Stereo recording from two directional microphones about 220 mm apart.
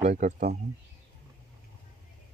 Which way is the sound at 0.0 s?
30° right (ahead or behind).